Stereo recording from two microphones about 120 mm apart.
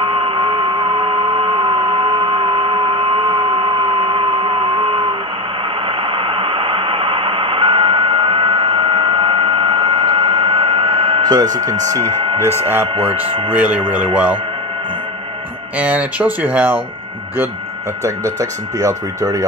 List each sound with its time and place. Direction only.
0.0 s a sound: 45° right (ahead or behind)
5.9 s radio: 45° right (ahead or behind)
11.8 s speech: 30° right (ahead or behind)
12.8 s speech: 50° right (ahead or behind)
13.5 s speech: 15° right (ahead or behind)
15.8 s speech: 10° right (ahead or behind)
18.0 s speech: 25° right (ahead or behind)